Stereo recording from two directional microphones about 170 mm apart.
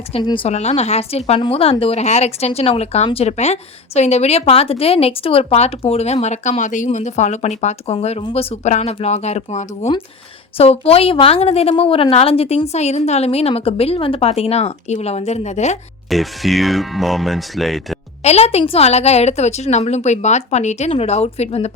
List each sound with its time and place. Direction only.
0.1 s speech: 30° left (ahead or behind)
16.0 s speech: centre (ahead or behind)
18.2 s speech: 40° left (ahead or behind)